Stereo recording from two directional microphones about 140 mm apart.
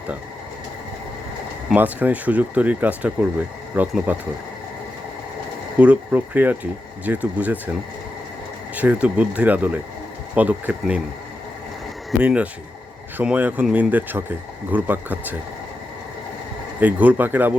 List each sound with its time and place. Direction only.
1.7 s speech: 10° right (ahead or behind)
5.8 s speech: 10° right (ahead or behind)
8.7 s speech: 10° right (ahead or behind)
12.2 s speech: 10° right (ahead or behind)
16.8 s speech: 10° right (ahead or behind)